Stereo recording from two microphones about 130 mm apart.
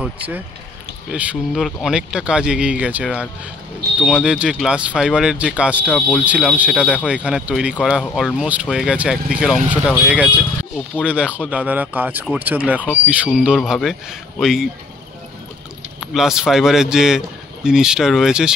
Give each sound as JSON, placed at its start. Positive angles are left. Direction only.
{"t": 0.0, "sound": "speech", "side_deg": -10}
{"t": 5.9, "sound": "speech", "side_deg": 10}
{"t": 6.1, "sound": "speech", "side_deg": -10}
{"t": 8.0, "sound": "speech", "side_deg": 5}
{"t": 8.4, "sound": "speech", "side_deg": -10}
{"t": 13.6, "sound": "speech", "side_deg": 0}
{"t": 16.1, "sound": "speech", "side_deg": -5}